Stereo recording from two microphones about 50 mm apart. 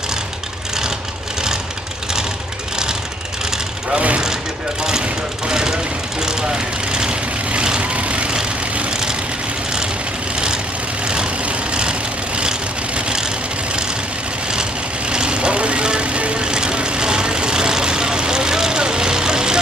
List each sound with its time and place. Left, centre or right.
2.7 s vehicle: centre
5.0 s vehicle: centre
10.3 s vehicle: centre